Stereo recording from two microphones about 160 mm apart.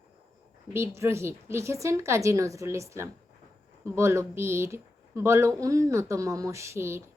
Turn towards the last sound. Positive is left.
turn(degrees=-15)  # may be behind; listen again after turning